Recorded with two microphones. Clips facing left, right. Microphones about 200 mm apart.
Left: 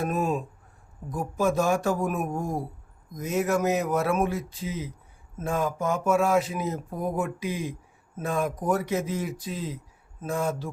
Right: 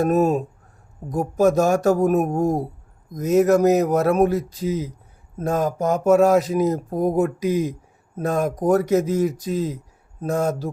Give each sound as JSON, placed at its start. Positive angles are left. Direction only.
{"t": 0.0, "sound": "speech", "side_deg": -40}